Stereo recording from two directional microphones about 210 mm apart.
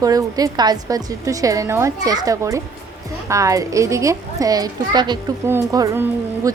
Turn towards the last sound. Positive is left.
turn(degrees=-15)  # may be behind; listen again after turning